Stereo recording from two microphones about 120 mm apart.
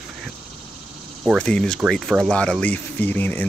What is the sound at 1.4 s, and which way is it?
Speech, 5° left (ahead or behind).